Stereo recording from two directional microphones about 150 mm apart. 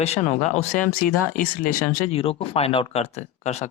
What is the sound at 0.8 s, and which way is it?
Speech, 75° left (ahead or behind).